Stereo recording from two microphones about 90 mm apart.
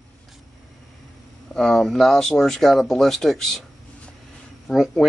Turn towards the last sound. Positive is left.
turn(degrees=0)  # may be behind; listen again after turning